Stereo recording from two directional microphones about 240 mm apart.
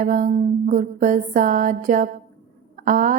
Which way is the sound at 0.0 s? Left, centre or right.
Right.